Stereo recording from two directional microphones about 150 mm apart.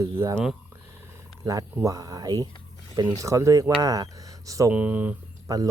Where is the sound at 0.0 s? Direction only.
20° right (ahead or behind).